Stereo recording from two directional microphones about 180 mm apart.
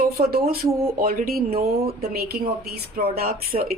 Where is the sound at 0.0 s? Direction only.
60° right (ahead or behind).